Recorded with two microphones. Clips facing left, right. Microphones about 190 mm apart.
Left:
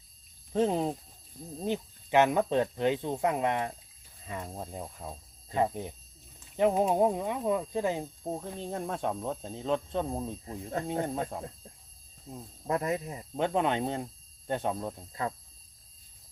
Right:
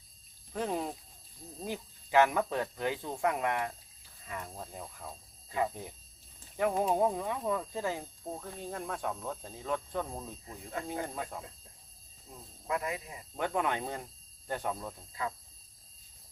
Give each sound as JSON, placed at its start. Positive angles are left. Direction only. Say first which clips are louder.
{"t": 0.5, "sound": "speech", "louder": "left 7 dB", "side_deg": 25}
{"t": 5.5, "sound": "speech", "louder": "left 4 dB", "side_deg": 30}
{"t": 8.2, "sound": "speech", "louder": "left 5 dB", "side_deg": 30}
{"t": 10.8, "sound": "speech", "louder": "left 6 dB", "side_deg": 25}
{"t": 13.3, "sound": "speech", "louder": "left 4 dB", "side_deg": 25}